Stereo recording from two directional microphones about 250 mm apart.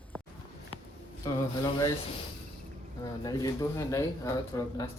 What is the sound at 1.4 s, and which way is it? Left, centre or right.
Speech, centre.